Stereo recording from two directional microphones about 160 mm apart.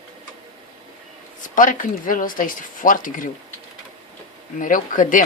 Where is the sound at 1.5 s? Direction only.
55° left (ahead or behind).